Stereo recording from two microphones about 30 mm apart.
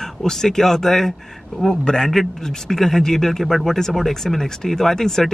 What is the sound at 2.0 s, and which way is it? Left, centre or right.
Speech, centre.